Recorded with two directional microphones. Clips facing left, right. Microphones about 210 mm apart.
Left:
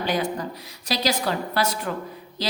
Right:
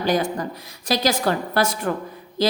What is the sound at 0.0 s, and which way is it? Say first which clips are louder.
A woman's voice: right 4 dB; 45° right (ahead or behind).